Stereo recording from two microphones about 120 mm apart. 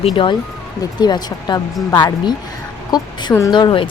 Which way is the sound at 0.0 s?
45° left (ahead or behind).